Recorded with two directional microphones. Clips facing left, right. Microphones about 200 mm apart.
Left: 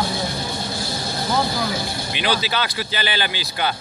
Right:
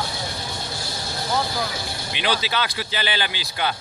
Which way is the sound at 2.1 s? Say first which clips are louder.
Left 1 dB; 20° right (ahead or behind).